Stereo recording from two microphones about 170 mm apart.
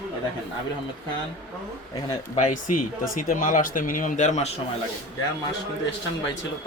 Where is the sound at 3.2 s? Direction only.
50° left (ahead or behind).